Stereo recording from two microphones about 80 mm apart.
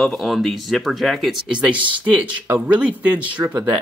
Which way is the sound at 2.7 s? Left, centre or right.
Centre.